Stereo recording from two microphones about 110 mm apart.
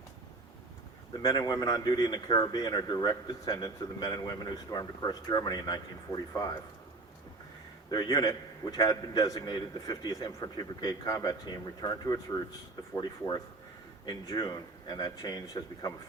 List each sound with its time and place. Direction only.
1.2 s a man's voice: 40° left (ahead or behind)
7.9 s a man's voice: 40° left (ahead or behind)